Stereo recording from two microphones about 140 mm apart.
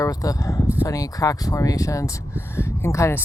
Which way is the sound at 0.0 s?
25° left (ahead or behind).